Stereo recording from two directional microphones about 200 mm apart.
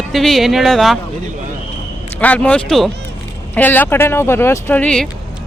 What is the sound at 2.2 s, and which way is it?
Speech, 5° left (ahead or behind).